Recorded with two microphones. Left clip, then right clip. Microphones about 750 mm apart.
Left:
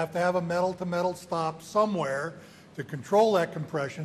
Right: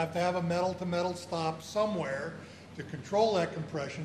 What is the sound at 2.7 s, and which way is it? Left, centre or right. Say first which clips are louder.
A man's voice: left 6 dB; left.